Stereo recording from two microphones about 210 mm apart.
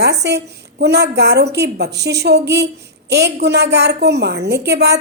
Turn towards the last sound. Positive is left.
turn(degrees=-50)  # may be behind; listen again after turning